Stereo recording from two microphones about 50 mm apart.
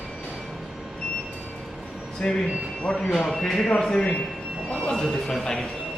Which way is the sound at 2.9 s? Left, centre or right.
Left.